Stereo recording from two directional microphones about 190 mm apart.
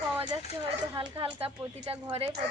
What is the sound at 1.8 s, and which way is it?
Speech, 25° right (ahead or behind).